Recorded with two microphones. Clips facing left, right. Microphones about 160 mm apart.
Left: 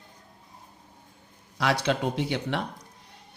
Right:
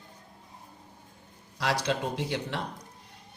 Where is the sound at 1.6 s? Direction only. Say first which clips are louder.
Left 3 dB; 60° left (ahead or behind).